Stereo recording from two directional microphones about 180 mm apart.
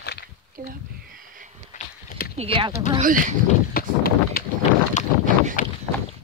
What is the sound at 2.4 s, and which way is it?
Speech, 30° right (ahead or behind).